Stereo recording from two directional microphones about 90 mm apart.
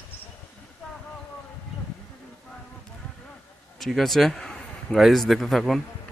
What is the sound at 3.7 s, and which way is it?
A man's voice, centre (ahead or behind).